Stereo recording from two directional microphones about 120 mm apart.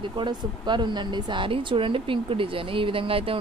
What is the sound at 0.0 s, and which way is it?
Speech, 40° right (ahead or behind).